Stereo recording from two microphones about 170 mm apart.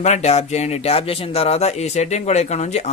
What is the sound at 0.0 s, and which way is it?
A man's voice, 40° left (ahead or behind).